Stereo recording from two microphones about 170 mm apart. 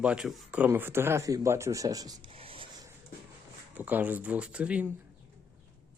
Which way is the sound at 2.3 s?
35° right (ahead or behind).